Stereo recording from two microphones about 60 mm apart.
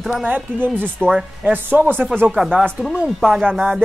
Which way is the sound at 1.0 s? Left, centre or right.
Centre.